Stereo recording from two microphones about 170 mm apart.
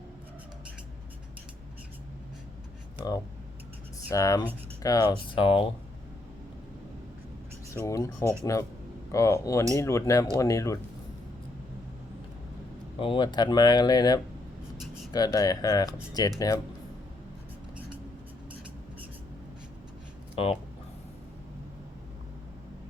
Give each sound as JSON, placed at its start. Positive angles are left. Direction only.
{"t": 4.1, "sound": "speech", "side_deg": 20}
{"t": 7.7, "sound": "speech", "side_deg": 15}
{"t": 8.2, "sound": "speech", "side_deg": -15}
{"t": 9.1, "sound": "speech", "side_deg": 15}
{"t": 13.0, "sound": "speech", "side_deg": 30}
{"t": 20.3, "sound": "speech", "side_deg": 35}